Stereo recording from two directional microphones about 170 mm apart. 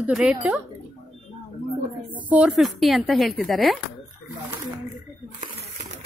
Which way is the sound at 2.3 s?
5° right (ahead or behind).